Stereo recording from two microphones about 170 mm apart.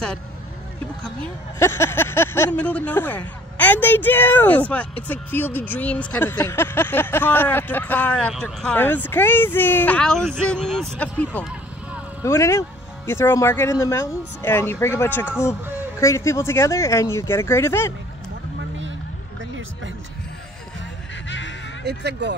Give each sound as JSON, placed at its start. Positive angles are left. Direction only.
{"t": 1.6, "sound": "speech", "side_deg": 15}
{"t": 21.3, "sound": "a sound", "side_deg": 90}
{"t": 21.8, "sound": "speech", "side_deg": -80}